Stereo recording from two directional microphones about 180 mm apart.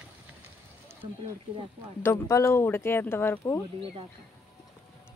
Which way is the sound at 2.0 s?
15° left (ahead or behind).